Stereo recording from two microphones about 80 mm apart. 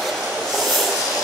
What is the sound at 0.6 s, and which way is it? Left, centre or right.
Train, centre.